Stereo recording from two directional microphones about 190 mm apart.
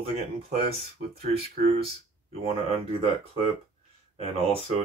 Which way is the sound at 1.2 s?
30° right (ahead or behind).